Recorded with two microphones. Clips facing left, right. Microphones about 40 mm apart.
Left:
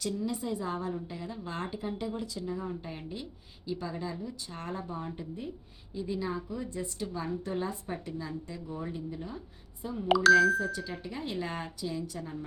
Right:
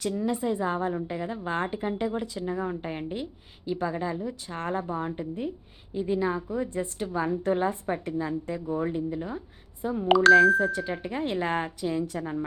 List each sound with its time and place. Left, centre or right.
0.2 s a woman's voice: right
9.8 s a woman's voice: right